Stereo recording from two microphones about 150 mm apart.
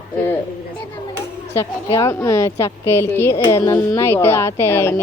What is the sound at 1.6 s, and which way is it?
A woman's voice, 20° left (ahead or behind).